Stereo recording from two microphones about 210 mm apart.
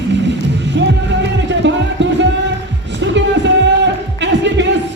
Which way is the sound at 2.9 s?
60° right (ahead or behind).